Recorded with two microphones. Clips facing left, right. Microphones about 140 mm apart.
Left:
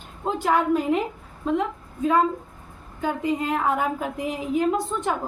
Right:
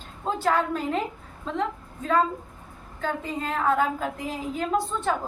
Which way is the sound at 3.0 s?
15° left (ahead or behind).